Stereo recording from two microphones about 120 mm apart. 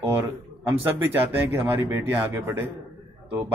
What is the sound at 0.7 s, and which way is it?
Speech, 20° right (ahead or behind).